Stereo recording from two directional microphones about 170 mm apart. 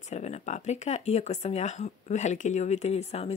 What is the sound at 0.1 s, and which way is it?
Speech, 40° left (ahead or behind).